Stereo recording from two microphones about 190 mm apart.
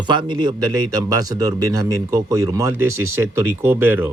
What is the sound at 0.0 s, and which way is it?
A man's voice, 25° right (ahead or behind).